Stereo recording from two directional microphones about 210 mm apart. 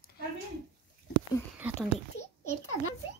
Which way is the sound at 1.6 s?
5° right (ahead or behind).